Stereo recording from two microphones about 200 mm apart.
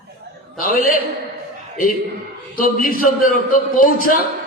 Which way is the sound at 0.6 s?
45° left (ahead or behind).